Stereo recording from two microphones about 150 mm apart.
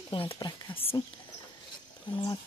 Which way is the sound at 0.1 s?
35° left (ahead or behind).